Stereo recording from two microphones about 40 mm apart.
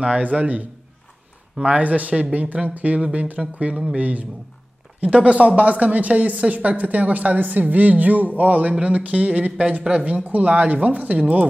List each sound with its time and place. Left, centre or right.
0.0 s speech: right
1.7 s speech: right